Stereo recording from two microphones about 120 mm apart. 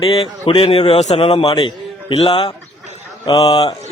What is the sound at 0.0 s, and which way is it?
A man's voice, 50° left (ahead or behind).